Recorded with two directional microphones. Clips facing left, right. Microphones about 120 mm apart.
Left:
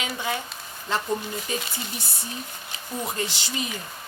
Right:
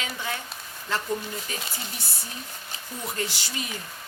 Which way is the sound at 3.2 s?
25° left (ahead or behind).